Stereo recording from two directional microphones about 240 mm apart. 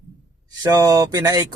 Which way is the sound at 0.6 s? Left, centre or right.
Centre.